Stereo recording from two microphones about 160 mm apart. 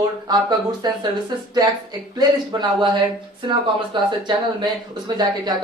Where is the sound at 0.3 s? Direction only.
25° right (ahead or behind).